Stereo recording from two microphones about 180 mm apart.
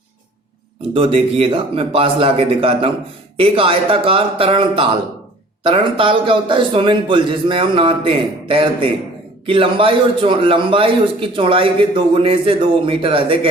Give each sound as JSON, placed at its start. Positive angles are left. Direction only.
{"t": 0.9, "sound": "a man's voice", "side_deg": -30}